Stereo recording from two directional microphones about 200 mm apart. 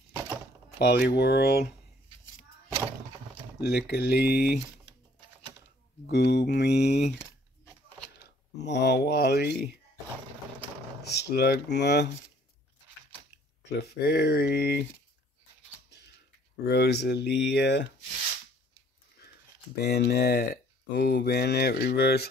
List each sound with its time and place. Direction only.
0.1 s a sound: 20° right (ahead or behind)
0.7 s speech: 55° left (ahead or behind)
3.6 s speech: 55° left (ahead or behind)
6.0 s speech: 55° left (ahead or behind)
8.5 s speech: 60° left (ahead or behind)
11.1 s speech: 55° left (ahead or behind)
13.7 s speech: 55° left (ahead or behind)
16.6 s speech: 55° left (ahead or behind)
19.8 s speech: 55° left (ahead or behind)